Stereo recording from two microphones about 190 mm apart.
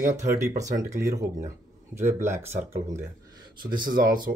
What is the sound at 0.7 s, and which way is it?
Speech, 15° right (ahead or behind).